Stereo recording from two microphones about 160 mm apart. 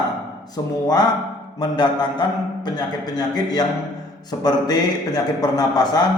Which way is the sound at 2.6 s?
25° left (ahead or behind).